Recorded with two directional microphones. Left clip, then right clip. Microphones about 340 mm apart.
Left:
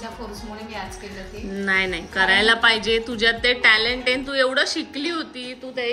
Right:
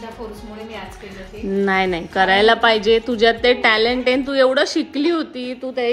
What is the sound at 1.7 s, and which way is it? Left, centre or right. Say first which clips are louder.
A woman's voice: even; centre.